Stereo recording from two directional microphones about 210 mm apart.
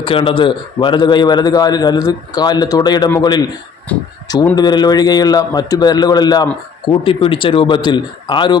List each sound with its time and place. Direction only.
0.0 s a man's voice: 25° left (ahead or behind)
4.5 s a man's voice: 20° left (ahead or behind)